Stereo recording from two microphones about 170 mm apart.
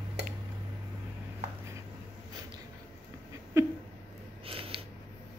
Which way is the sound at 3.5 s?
20° right (ahead or behind).